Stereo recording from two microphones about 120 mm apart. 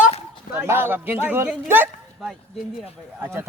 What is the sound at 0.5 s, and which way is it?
Speech, 20° right (ahead or behind).